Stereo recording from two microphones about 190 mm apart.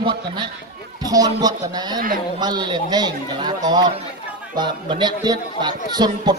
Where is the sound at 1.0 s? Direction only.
20° right (ahead or behind).